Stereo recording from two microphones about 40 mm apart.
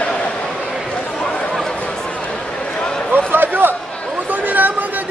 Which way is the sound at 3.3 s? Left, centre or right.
Right.